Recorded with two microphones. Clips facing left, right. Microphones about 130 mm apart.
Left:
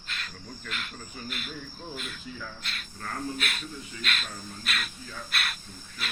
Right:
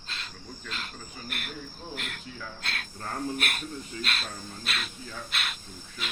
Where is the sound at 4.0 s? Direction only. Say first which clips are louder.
Left 2 dB; 35° right (ahead or behind); by 6.1 s 20° right (ahead or behind).